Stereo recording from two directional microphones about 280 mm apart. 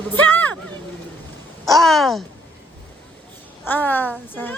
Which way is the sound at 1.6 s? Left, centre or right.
Centre.